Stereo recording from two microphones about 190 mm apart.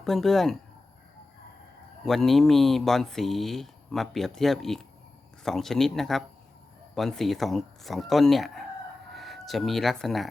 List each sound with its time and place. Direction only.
0.0 s speech: centre (ahead or behind)
2.0 s speech: centre (ahead or behind)